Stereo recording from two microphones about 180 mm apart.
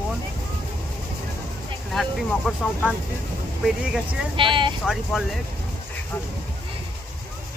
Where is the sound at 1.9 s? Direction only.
Centre (ahead or behind).